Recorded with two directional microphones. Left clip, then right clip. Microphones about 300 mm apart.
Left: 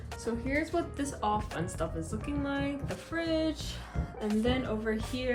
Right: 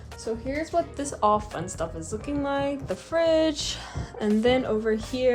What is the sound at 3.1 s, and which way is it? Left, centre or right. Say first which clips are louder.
Music: right 10 dB; centre.